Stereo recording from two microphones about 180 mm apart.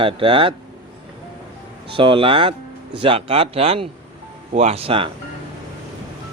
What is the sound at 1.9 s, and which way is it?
Speech, 30° right (ahead or behind).